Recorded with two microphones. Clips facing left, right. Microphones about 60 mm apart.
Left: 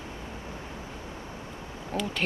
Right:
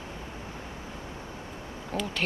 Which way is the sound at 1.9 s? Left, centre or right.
Centre.